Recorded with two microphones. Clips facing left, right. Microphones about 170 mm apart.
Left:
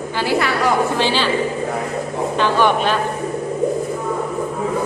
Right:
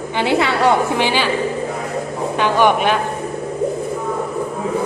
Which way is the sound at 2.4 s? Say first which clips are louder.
Right 2 dB; 15° right (ahead or behind).